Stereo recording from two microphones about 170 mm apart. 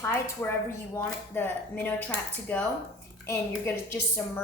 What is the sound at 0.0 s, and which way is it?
A woman's voice, 15° left (ahead or behind).